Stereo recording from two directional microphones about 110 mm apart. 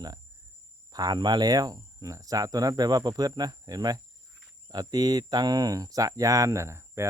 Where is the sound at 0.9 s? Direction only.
35° right (ahead or behind).